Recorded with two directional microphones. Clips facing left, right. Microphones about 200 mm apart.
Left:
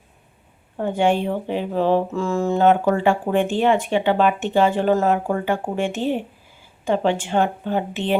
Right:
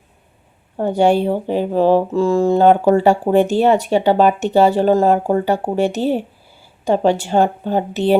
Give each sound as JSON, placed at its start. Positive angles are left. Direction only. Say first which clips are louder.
{"t": 0.8, "sound": "speech", "louder": "right 5 dB", "side_deg": -40}